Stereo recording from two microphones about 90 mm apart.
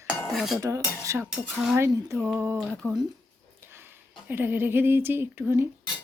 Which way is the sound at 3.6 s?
25° right (ahead or behind).